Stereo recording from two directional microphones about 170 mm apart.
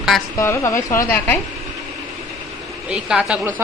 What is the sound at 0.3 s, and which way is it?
Speech, 20° left (ahead or behind).